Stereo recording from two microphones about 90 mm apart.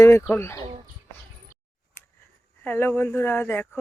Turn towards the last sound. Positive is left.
turn(degrees=20)  # may be behind; listen again after turning